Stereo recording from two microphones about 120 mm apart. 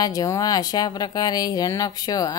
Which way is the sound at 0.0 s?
30° left (ahead or behind).